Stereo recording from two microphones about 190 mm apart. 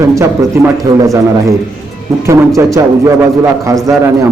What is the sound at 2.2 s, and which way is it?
A man's voice, 15° right (ahead or behind).